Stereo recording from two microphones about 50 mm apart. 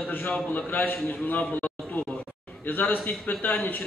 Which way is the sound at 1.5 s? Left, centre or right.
Left.